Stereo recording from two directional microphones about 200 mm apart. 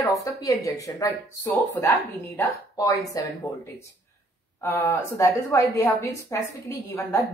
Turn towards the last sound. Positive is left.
turn(degrees=15)  # may be behind; listen again after turning